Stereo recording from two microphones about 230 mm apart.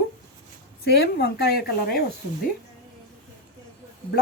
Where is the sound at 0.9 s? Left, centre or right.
Left.